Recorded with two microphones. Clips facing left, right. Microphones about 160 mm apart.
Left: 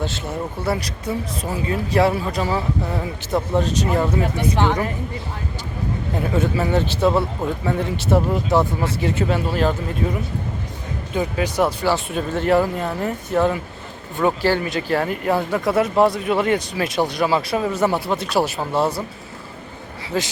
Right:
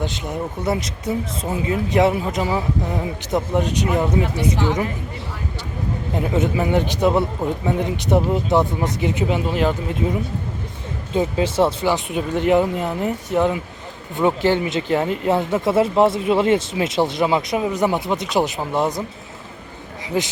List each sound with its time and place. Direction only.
0.0 s speech: 15° right (ahead or behind)
6.3 s speech: 20° right (ahead or behind)
20.1 s speech: 15° right (ahead or behind)